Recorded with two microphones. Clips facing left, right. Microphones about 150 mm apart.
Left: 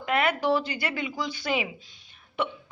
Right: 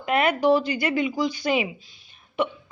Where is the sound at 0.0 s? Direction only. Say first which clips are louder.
Right 4 dB; 20° right (ahead or behind).